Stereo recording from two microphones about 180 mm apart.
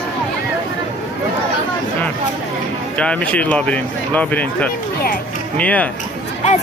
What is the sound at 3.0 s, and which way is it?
Speech, 5° left (ahead or behind).